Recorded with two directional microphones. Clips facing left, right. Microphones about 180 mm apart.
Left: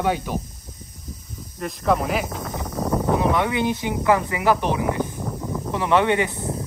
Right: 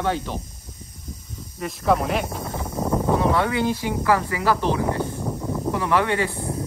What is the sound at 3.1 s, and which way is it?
Speech, 15° left (ahead or behind).